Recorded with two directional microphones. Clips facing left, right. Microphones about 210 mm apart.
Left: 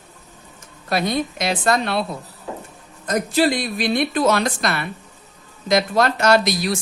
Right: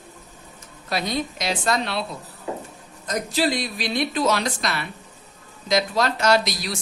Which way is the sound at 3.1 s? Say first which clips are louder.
Left 5 dB; 55° left (ahead or behind).